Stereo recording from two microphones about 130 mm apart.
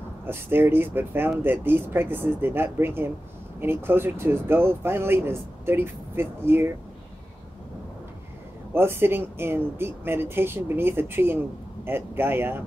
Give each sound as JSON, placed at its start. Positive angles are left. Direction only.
{"t": 0.3, "sound": "speech", "side_deg": -15}
{"t": 8.7, "sound": "speech", "side_deg": -15}